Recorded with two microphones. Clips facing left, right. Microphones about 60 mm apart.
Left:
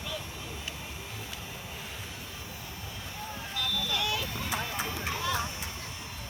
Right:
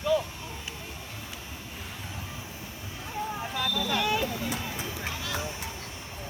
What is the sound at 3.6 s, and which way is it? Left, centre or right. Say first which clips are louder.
Vehicle: right 4 dB; right.